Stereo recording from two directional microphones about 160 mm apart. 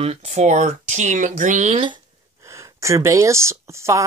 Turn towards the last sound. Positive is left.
turn(degrees=-20)  # may be behind; listen again after turning